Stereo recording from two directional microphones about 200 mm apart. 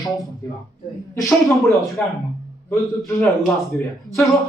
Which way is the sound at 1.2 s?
Centre (ahead or behind).